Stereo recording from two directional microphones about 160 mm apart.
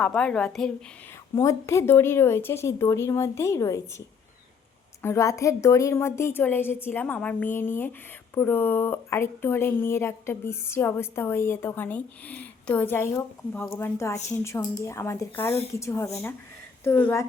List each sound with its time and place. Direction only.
0.0 s a woman's voice: 5° left (ahead or behind)
1.4 s speech: 15° left (ahead or behind)
5.0 s speech: 20° left (ahead or behind)